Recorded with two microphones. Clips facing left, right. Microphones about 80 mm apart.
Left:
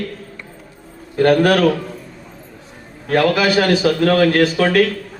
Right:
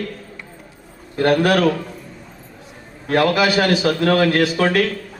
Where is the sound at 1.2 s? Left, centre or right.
Left.